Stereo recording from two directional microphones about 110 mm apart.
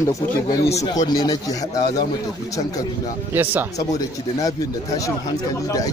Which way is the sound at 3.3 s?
20° right (ahead or behind).